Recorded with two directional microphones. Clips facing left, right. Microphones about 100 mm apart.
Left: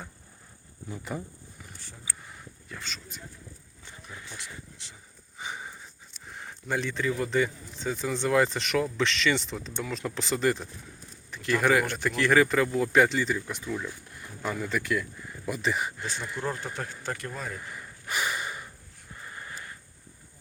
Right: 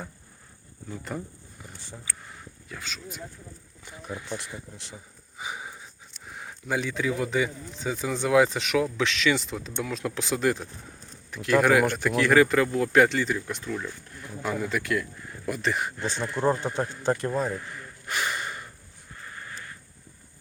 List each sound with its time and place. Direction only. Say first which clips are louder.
0.9 s speech: right 1 dB; 5° left (ahead or behind)
2.2 s a sound: right 1 dB; centre (ahead or behind)
4.3 s speech: right 8 dB; 60° right (ahead or behind)
5.4 s speech: right 2 dB; 5° right (ahead or behind)
16.4 s speech: right 10 dB; 30° right (ahead or behind)
17.6 s snort: right 1 dB; 5° left (ahead or behind)
19.2 s sniff: right 1 dB; 15° left (ahead or behind)